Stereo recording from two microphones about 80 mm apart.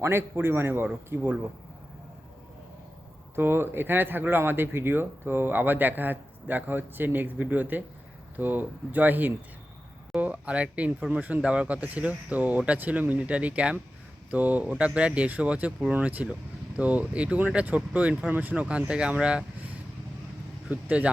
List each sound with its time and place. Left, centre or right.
0.0 s speech: right
3.3 s speech: right; by 19.5 s centre
20.7 s speech: centre